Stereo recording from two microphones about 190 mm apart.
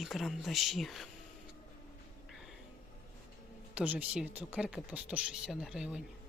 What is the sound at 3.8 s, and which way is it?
Speech, 5° right (ahead or behind).